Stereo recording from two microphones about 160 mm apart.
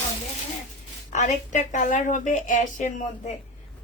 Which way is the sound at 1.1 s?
50° left (ahead or behind).